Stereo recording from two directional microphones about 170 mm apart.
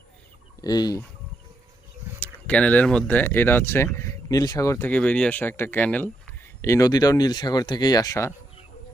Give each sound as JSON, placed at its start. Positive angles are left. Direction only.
{"t": 0.6, "sound": "fowl", "side_deg": 25}
{"t": 2.2, "sound": "speech", "side_deg": 10}